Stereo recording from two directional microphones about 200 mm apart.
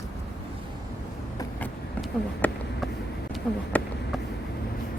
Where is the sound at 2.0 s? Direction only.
Centre (ahead or behind).